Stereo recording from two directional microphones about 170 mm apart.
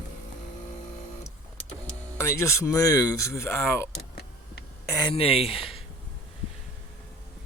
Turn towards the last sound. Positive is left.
turn(degrees=35)  # may be behind; listen again after turning